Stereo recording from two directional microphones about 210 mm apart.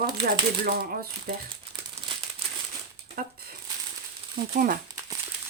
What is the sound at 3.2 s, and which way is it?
Speech, 45° right (ahead or behind).